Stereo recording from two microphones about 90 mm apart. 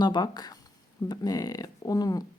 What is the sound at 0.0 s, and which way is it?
Speech, 50° left (ahead or behind).